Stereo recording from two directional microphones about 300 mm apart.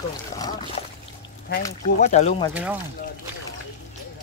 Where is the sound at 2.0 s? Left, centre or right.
Left.